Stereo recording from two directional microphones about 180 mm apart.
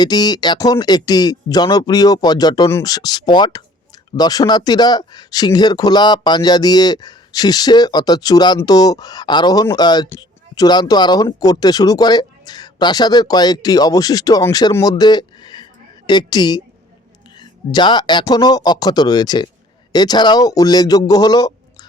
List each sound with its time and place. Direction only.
0.0 s speech: 20° left (ahead or behind)